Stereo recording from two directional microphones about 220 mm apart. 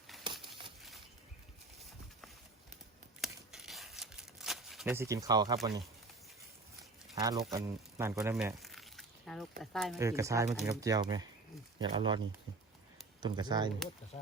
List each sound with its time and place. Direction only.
3.2 s a sound: centre (ahead or behind); by 5.5 s 15° right (ahead or behind)
7.2 s speech: 15° right (ahead or behind); by 9.9 s centre (ahead or behind)
10.0 s speech: 15° right (ahead or behind)
13.2 s speech: 20° right (ahead or behind)